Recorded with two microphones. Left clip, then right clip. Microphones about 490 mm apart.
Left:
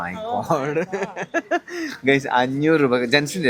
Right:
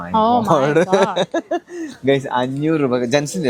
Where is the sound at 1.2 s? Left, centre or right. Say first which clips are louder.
Right 3 dB; right.